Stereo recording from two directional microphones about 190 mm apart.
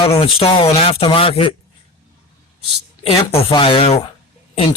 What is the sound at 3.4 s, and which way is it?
Speech, 25° left (ahead or behind).